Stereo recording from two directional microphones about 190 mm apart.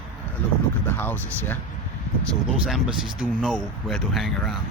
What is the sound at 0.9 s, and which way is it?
Speech, 10° left (ahead or behind).